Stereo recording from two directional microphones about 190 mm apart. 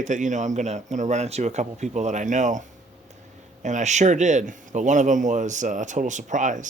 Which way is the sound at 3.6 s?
40° right (ahead or behind).